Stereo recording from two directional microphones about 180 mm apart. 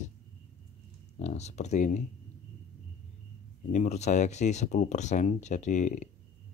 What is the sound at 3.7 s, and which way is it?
Speech, 40° left (ahead or behind).